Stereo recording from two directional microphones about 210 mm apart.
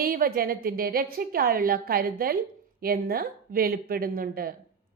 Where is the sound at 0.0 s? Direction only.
45° right (ahead or behind).